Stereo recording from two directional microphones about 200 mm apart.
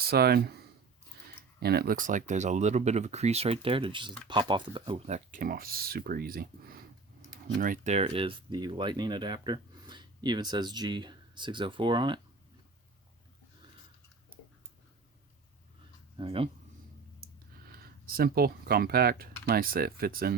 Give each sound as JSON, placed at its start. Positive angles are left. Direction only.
{"t": 0.1, "sound": "speech", "side_deg": -50}
{"t": 1.5, "sound": "speech", "side_deg": -50}
{"t": 16.1, "sound": "speech", "side_deg": -25}
{"t": 17.7, "sound": "speech", "side_deg": -50}